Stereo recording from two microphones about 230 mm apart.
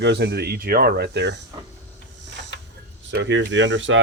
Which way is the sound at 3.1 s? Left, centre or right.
Right.